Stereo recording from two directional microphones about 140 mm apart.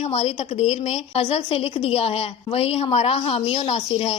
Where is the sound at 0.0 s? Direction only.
50° left (ahead or behind).